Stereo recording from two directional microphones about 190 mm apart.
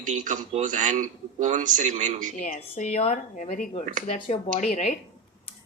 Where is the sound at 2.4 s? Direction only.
40° left (ahead or behind).